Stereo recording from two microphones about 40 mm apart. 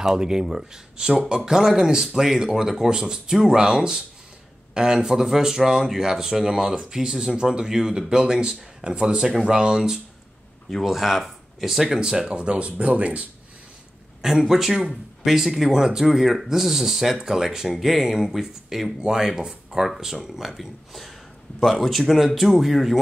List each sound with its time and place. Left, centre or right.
0.0 s speech: centre
10.7 s speech: centre
12.0 s speech: centre; by 13.3 s right
14.5 s a man's voice: centre